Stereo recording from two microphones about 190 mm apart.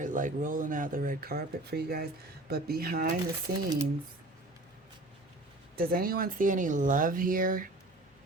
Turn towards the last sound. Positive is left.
turn(degrees=-45)  # may be behind; listen again after turning